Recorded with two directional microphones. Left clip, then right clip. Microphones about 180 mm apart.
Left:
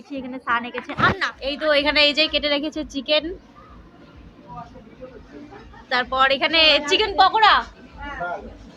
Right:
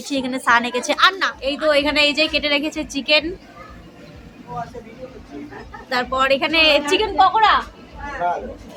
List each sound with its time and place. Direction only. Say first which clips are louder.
0.1 s a woman's voice: right 7 dB; 35° right (ahead or behind)
1.2 s a woman's voice: right 4 dB; 5° right (ahead or behind)
5.9 s a woman's voice: right 1 dB; 5° right (ahead or behind)
7.2 s a woman's voice: right 1 dB; 15° left (ahead or behind)